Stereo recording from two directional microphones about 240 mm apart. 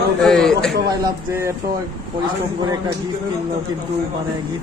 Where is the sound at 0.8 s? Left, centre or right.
Centre.